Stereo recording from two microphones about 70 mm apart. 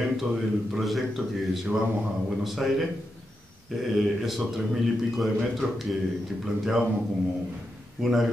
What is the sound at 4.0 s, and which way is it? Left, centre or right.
Speech, centre.